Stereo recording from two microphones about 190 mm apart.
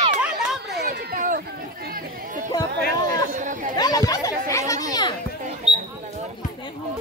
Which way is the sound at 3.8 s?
20° left (ahead or behind).